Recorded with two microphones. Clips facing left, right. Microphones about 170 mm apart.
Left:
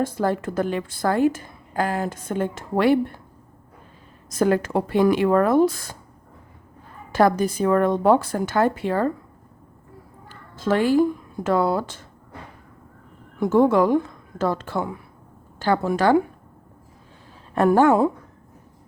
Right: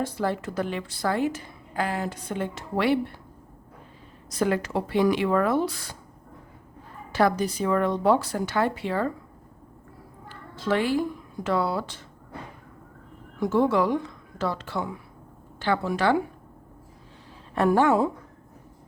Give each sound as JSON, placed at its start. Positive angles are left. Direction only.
{"t": 0.0, "sound": "a woman's voice", "side_deg": 45}
{"t": 4.3, "sound": "a woman's voice", "side_deg": 45}
{"t": 7.1, "sound": "a woman's voice", "side_deg": 45}
{"t": 10.2, "sound": "a sound", "side_deg": 45}
{"t": 11.4, "sound": "a woman's voice", "side_deg": 45}
{"t": 13.4, "sound": "a woman's voice", "side_deg": 50}
{"t": 17.5, "sound": "a woman's voice", "side_deg": 45}